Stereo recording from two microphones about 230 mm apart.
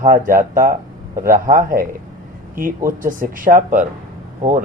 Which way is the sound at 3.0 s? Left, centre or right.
Right.